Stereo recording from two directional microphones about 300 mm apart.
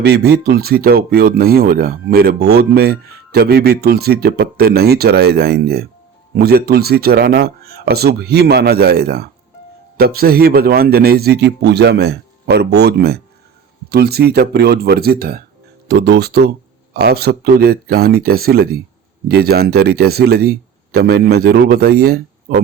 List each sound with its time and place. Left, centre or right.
0.0 s speech: right